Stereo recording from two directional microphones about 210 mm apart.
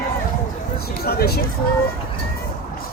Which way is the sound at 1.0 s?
50° left (ahead or behind).